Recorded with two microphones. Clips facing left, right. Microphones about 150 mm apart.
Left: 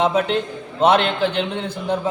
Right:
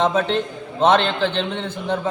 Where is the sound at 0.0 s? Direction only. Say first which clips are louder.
Left 1 dB; 15° left (ahead or behind).